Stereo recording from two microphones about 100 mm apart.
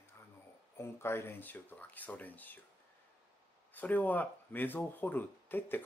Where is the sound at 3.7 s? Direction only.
15° left (ahead or behind).